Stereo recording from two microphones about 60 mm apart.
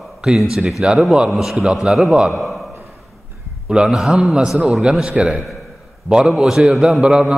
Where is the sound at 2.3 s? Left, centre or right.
Centre.